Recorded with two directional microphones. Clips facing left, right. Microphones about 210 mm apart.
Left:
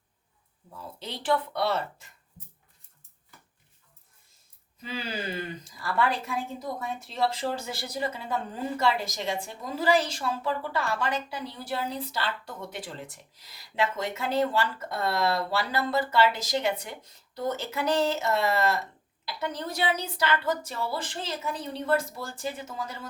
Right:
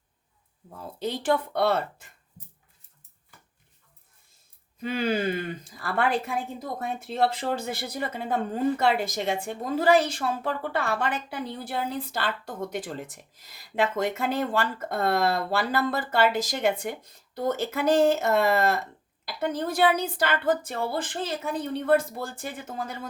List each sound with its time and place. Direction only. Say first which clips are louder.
0.9 s speech: right 3 dB; 50° right (ahead or behind)
4.8 s speech: right 9 dB; 55° right (ahead or behind)